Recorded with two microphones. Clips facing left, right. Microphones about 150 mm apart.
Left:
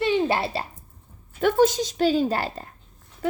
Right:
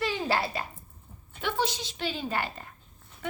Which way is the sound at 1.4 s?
45° left (ahead or behind).